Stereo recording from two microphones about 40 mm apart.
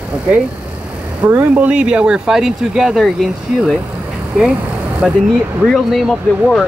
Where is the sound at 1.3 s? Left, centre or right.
Right.